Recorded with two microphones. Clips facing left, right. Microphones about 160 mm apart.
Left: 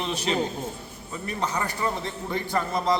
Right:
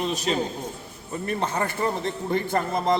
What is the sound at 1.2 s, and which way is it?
A man's voice, 55° right (ahead or behind).